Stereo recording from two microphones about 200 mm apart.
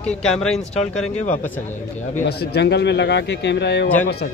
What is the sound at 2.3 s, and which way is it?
A man's voice, 55° left (ahead or behind).